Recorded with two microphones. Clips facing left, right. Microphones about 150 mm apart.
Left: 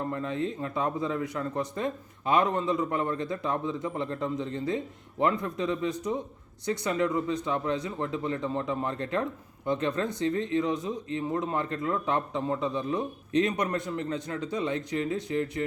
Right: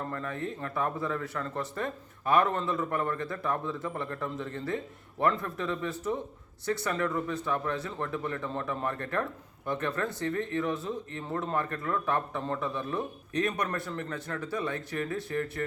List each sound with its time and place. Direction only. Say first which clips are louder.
0.1 s speech: left 4 dB; 20° left (ahead or behind)